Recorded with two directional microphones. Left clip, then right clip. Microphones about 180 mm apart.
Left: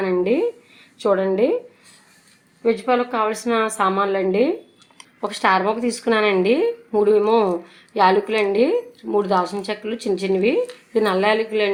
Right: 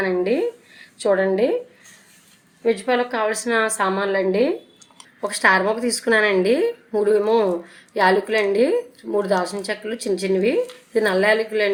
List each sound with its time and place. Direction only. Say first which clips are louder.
0.0 s a woman's voice: left 1 dB; 55° left (ahead or behind)
2.6 s a woman's voice: left 1 dB; 50° left (ahead or behind)
5.2 s a woman's voice: right 1 dB; 40° left (ahead or behind)